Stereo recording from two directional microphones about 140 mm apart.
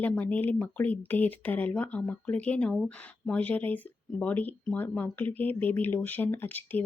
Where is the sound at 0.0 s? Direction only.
10° left (ahead or behind).